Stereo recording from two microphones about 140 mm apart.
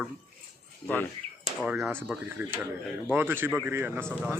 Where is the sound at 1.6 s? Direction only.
5° right (ahead or behind).